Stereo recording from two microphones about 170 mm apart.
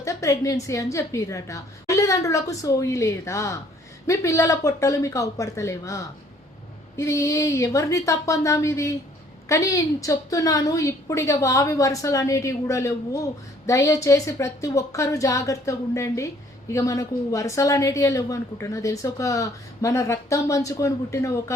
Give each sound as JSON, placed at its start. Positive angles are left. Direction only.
{"t": 0.0, "sound": "a woman's voice", "side_deg": 20}